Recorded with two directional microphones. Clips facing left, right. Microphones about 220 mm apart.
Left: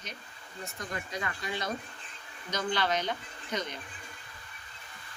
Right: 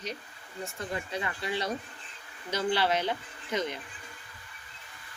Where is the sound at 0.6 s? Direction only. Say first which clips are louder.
Right 3 dB; 30° right (ahead or behind).